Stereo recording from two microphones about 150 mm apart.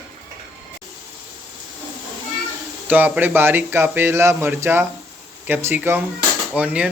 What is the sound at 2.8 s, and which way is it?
Speech, 10° right (ahead or behind).